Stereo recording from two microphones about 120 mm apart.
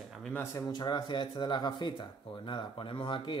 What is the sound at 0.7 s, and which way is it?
Speech, 40° left (ahead or behind).